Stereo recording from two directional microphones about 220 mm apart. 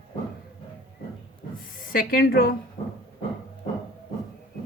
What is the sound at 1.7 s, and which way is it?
Speech, 40° left (ahead or behind).